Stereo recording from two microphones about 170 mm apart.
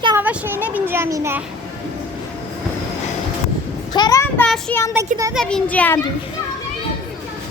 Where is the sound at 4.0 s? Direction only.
20° left (ahead or behind).